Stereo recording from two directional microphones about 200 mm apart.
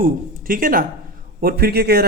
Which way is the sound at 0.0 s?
45° right (ahead or behind).